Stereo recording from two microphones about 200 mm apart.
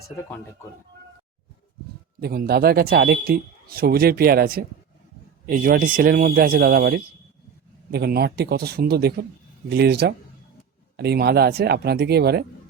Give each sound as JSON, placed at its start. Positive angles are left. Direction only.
{"t": 2.2, "sound": "speech", "side_deg": -50}